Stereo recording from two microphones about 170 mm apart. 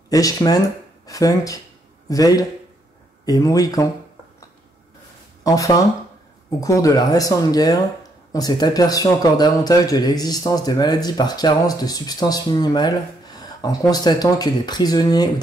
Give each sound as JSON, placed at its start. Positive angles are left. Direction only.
{"t": 0.1, "sound": "a man's voice", "side_deg": 20}
{"t": 5.4, "sound": "speech", "side_deg": 20}